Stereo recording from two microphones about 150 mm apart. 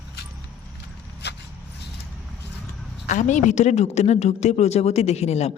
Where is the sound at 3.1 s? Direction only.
55° left (ahead or behind).